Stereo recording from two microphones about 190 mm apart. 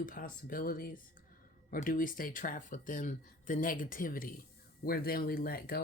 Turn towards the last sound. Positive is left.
turn(degrees=55)  # may be behind; listen again after turning